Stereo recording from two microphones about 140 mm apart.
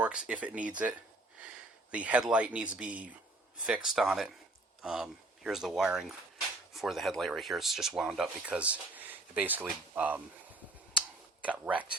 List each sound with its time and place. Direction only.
0.0 s speech: 5° right (ahead or behind)
11.4 s speech: 10° right (ahead or behind)